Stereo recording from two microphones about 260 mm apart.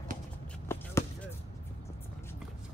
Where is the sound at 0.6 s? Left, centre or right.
Centre.